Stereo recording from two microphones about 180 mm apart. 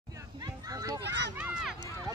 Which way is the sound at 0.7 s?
20° right (ahead or behind).